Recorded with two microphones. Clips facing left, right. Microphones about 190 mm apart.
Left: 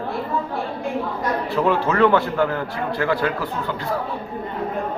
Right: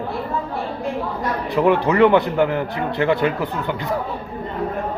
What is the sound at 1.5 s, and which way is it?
A man's voice, 15° right (ahead or behind).